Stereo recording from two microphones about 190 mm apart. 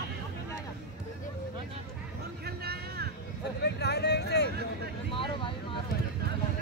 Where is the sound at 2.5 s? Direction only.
55° right (ahead or behind).